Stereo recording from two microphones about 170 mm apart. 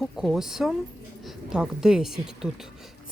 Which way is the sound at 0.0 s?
Centre (ahead or behind).